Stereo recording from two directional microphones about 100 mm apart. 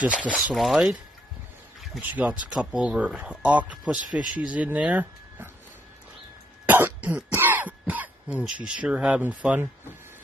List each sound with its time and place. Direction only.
0.0 s speech: 15° right (ahead or behind)
2.0 s speech: 15° right (ahead or behind)
6.6 s cough: 20° right (ahead or behind)
8.6 s speech: 10° right (ahead or behind)